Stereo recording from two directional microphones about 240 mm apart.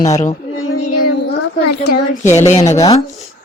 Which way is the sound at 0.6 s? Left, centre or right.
Left.